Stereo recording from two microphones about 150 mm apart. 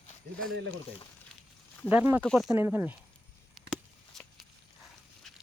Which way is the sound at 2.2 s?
Centre (ahead or behind).